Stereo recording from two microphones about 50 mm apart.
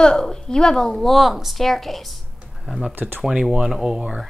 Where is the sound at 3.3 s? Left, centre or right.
Centre.